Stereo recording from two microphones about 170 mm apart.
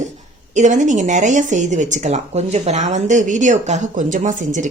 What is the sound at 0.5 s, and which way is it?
A woman's voice, 45° right (ahead or behind).